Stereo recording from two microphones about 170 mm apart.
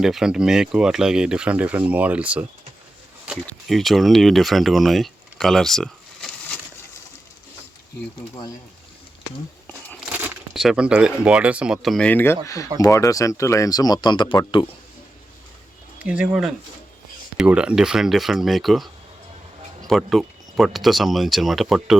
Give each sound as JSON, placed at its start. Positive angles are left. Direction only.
{"t": 0.0, "sound": "speech", "side_deg": -5}
{"t": 9.6, "sound": "a sound", "side_deg": 10}
{"t": 10.1, "sound": "speech", "side_deg": -10}
{"t": 16.0, "sound": "speech", "side_deg": -5}
{"t": 19.9, "sound": "speech", "side_deg": 0}